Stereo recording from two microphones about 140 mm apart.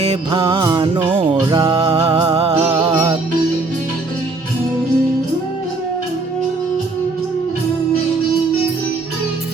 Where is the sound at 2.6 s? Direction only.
30° right (ahead or behind).